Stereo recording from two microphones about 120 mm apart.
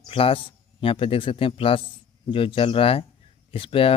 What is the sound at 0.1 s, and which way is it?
A man's voice, 50° left (ahead or behind).